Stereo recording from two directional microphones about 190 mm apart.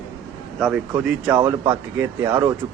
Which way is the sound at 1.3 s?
15° right (ahead or behind).